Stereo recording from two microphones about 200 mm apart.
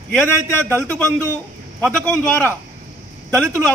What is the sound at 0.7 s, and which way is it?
A man's voice, 10° left (ahead or behind).